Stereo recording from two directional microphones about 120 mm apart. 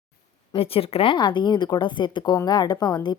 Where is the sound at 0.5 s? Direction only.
50° left (ahead or behind).